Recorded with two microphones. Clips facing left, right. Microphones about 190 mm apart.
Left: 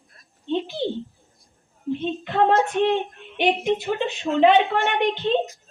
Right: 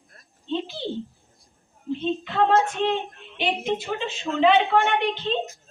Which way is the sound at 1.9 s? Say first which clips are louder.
Left 1 dB; 55° left (ahead or behind).